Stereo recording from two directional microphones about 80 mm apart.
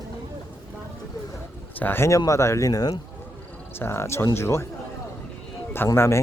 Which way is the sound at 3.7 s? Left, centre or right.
Left.